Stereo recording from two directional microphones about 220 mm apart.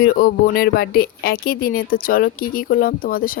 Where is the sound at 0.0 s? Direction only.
45° left (ahead or behind).